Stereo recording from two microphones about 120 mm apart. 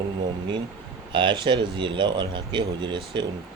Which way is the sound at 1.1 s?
40° right (ahead or behind).